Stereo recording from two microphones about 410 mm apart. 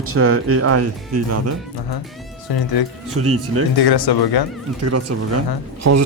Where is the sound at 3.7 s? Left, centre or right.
Left.